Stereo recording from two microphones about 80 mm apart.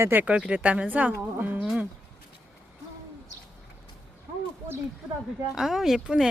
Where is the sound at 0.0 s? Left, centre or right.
Right.